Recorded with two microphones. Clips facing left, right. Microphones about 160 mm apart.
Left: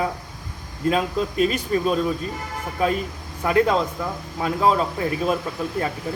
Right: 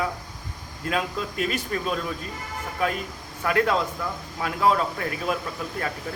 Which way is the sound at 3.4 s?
20° left (ahead or behind).